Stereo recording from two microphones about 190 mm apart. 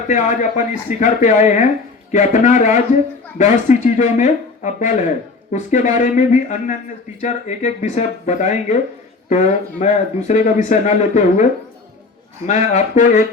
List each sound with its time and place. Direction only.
0.1 s speech: 40° left (ahead or behind)
12.5 s speech: 40° left (ahead or behind)